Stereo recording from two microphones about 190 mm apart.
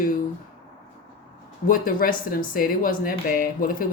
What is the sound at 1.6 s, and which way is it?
Speech, 45° left (ahead or behind).